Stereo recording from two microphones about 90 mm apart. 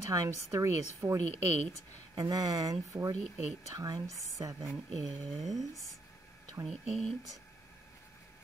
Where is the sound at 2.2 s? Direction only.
45° right (ahead or behind).